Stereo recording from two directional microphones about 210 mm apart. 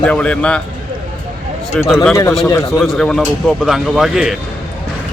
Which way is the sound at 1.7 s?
5° left (ahead or behind).